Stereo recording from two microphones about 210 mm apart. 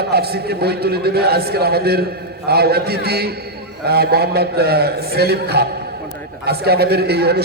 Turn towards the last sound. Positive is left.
turn(degrees=-50)  # may be behind; listen again after turning